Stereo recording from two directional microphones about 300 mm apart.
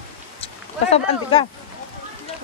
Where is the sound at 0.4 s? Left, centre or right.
Centre.